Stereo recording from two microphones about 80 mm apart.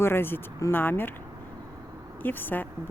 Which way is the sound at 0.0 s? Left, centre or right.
Left.